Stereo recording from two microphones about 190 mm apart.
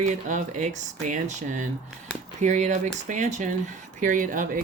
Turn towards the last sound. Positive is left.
turn(degrees=-45)  # may be behind; listen again after turning